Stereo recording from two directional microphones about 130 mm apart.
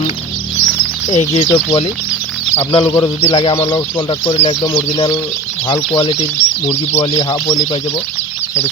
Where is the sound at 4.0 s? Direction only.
45° left (ahead or behind).